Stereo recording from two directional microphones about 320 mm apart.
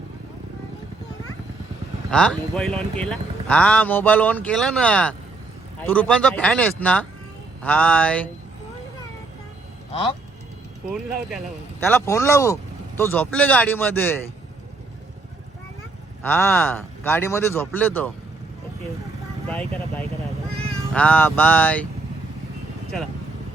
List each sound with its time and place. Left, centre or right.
2.0 s speech: centre
9.9 s speech: centre
11.8 s speech: centre
16.2 s speech: centre
19.5 s speech: centre